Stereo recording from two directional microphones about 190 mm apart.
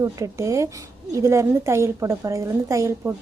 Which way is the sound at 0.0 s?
15° right (ahead or behind).